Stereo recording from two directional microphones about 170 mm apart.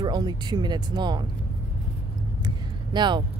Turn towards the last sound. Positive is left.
turn(degrees=-25)  # may be behind; listen again after turning